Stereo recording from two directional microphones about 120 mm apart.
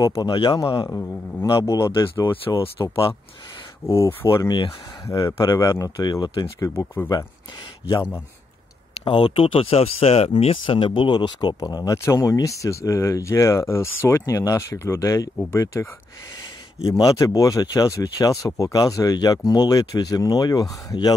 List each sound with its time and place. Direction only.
0.0 s speech: 30° left (ahead or behind)
0.8 s speech: 20° left (ahead or behind)
3.8 s speech: 25° left (ahead or behind)
6.6 s speech: 25° left (ahead or behind)
9.0 s speech: 45° left (ahead or behind); by 15.9 s 25° left (ahead or behind)
17.0 s speech: 30° left (ahead or behind)